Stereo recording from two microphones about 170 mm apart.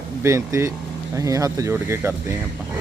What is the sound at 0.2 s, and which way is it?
Speech, 15° right (ahead or behind).